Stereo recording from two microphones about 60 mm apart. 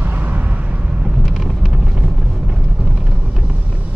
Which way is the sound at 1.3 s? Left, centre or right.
Centre.